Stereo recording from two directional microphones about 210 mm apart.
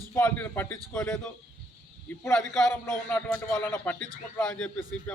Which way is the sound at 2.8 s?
10° left (ahead or behind).